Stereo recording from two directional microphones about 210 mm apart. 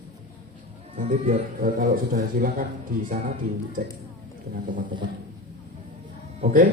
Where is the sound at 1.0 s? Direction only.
40° right (ahead or behind).